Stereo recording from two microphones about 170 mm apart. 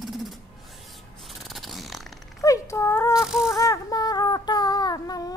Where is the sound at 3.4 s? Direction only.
20° left (ahead or behind).